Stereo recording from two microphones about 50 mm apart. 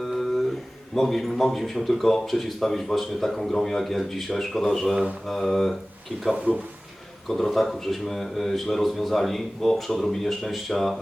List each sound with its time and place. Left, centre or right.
0.0 s a sound: centre
0.9 s a man's voice: centre
7.3 s a man's voice: centre